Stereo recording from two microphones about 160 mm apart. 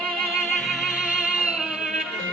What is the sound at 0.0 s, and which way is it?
Music, 5° left (ahead or behind).